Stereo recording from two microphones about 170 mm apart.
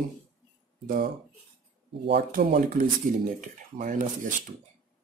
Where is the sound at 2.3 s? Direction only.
55° right (ahead or behind).